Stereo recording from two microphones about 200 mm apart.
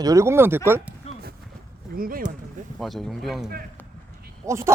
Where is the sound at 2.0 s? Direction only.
45° right (ahead or behind).